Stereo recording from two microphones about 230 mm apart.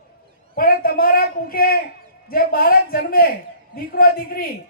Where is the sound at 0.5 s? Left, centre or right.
Left.